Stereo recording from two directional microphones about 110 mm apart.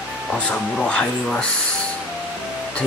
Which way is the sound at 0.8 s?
10° left (ahead or behind).